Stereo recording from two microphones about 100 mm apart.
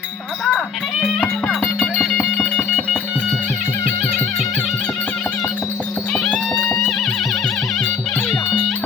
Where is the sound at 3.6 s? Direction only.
25° left (ahead or behind).